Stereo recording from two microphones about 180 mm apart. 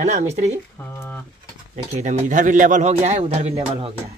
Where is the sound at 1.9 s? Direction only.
40° right (ahead or behind).